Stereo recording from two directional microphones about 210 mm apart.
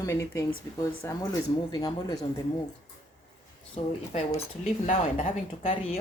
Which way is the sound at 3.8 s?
25° left (ahead or behind).